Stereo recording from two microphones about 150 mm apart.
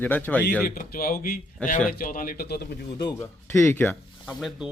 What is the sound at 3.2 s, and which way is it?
A man's voice, 15° left (ahead or behind).